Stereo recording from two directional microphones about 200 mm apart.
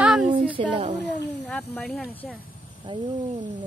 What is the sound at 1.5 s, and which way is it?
Speech, 5° left (ahead or behind).